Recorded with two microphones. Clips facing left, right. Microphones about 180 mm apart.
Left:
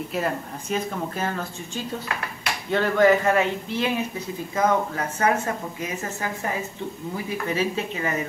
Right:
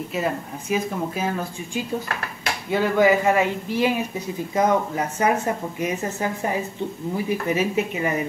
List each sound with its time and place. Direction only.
0.1 s speech: 5° right (ahead or behind)
2.7 s speech: 10° right (ahead or behind)
7.4 s speech: 15° right (ahead or behind)